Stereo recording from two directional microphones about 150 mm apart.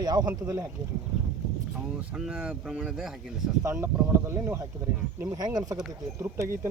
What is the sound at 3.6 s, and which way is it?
Speech, 20° right (ahead or behind).